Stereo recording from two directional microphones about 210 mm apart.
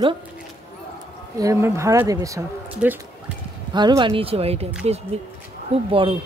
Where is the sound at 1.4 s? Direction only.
15° right (ahead or behind).